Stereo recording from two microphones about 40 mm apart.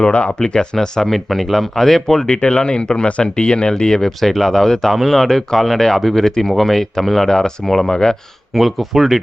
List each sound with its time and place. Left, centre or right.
0.3 s speech: centre
2.2 s speech: left
4.2 s speech: centre
8.5 s speech: centre